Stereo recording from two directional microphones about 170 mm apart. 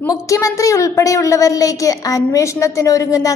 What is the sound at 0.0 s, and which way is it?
A woman's voice, 20° left (ahead or behind).